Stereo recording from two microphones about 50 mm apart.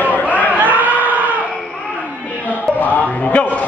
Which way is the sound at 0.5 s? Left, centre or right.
Right.